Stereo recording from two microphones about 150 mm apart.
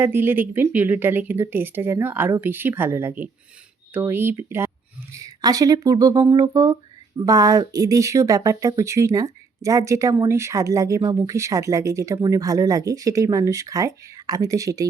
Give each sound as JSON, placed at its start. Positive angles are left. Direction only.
{"t": 0.0, "sound": "speech", "side_deg": -15}